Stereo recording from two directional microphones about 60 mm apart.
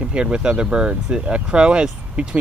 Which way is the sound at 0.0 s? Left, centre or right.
Centre.